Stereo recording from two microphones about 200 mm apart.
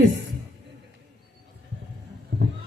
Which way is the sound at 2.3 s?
60° right (ahead or behind).